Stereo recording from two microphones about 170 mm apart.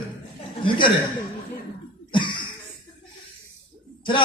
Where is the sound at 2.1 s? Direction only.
30° left (ahead or behind).